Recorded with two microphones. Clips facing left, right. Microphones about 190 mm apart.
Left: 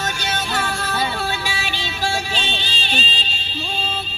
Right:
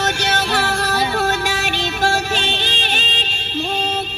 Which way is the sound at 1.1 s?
45° right (ahead or behind).